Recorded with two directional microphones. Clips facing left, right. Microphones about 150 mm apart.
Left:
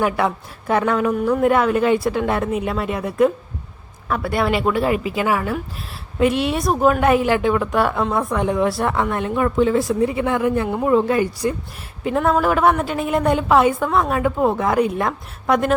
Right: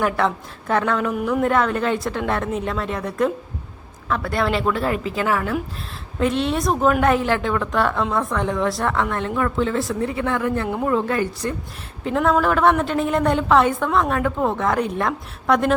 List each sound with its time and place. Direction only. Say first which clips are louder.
0.0 s a woman's voice: left 1 dB; 10° left (ahead or behind)